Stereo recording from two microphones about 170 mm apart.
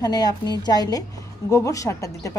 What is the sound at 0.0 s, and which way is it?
A woman's voice, 20° left (ahead or behind).